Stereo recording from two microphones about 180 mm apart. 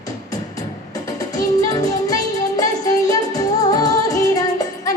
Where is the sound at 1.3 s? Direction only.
20° left (ahead or behind).